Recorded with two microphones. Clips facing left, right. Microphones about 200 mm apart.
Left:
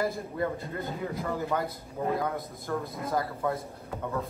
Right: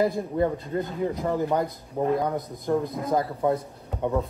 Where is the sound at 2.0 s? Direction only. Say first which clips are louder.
Right 5 dB; 40° right (ahead or behind).